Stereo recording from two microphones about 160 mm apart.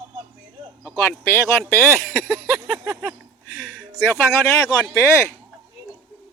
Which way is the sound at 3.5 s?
5° left (ahead or behind).